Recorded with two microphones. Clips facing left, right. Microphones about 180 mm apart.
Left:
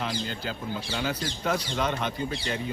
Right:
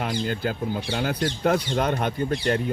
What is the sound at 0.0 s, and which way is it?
Speech, 55° right (ahead or behind).